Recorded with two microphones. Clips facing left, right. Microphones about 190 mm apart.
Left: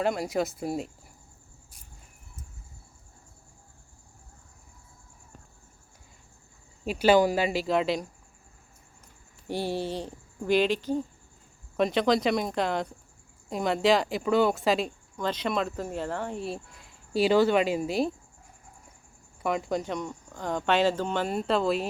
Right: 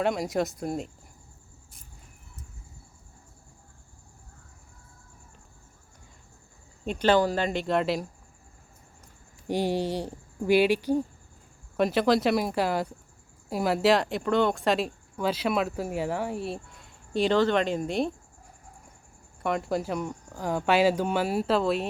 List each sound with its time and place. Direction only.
0.0 s speech: centre (ahead or behind)
6.8 s speech: 5° left (ahead or behind)
9.5 s speech: 15° right (ahead or behind); by 18.1 s 5° left (ahead or behind)
19.4 s speech: centre (ahead or behind)